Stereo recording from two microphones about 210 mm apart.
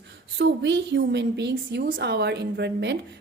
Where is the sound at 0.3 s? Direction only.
55° right (ahead or behind).